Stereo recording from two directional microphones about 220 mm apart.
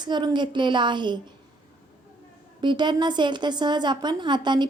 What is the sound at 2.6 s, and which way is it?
A woman's voice, 20° right (ahead or behind).